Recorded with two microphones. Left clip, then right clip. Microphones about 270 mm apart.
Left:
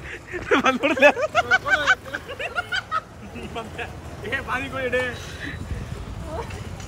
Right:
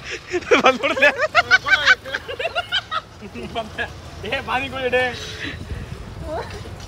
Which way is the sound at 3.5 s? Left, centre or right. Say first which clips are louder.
Right 6 dB; right.